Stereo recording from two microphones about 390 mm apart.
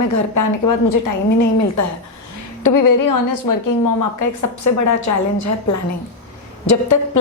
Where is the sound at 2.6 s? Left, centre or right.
Left.